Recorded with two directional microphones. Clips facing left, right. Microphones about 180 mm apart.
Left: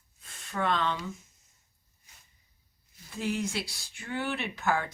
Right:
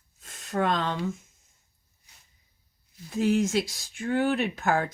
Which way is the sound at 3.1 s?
45° right (ahead or behind).